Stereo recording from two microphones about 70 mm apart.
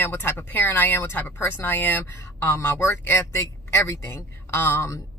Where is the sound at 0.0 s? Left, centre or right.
Left.